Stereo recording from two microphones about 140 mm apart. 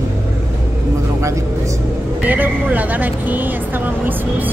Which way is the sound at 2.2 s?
10° right (ahead or behind).